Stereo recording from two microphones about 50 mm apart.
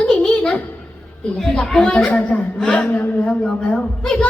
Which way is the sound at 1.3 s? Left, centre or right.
Centre.